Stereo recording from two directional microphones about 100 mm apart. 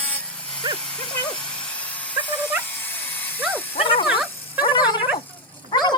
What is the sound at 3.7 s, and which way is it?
Dog, 65° left (ahead or behind).